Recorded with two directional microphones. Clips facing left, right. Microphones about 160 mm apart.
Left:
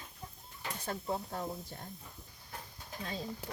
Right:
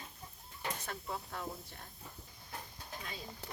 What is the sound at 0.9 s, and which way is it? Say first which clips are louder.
Speech: left 6 dB; 35° left (ahead or behind).